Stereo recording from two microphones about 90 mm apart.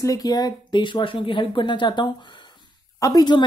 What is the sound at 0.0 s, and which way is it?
Speech, 45° left (ahead or behind).